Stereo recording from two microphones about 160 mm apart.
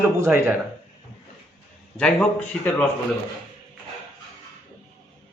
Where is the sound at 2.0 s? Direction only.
5° left (ahead or behind).